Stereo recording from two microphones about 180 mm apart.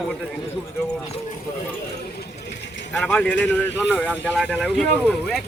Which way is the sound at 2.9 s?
5° left (ahead or behind).